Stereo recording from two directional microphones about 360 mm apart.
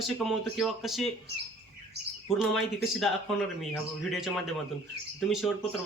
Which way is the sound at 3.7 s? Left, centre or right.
Centre.